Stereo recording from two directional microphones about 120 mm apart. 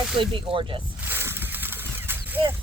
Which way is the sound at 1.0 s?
20° right (ahead or behind).